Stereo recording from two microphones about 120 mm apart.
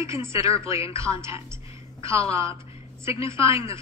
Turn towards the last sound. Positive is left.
turn(degrees=-25)  # may be behind; listen again after turning